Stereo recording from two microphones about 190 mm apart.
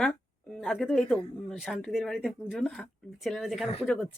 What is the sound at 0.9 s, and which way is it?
Speech, 5° left (ahead or behind).